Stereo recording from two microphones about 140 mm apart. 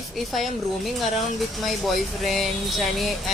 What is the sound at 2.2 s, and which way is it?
A woman's voice, centre (ahead or behind).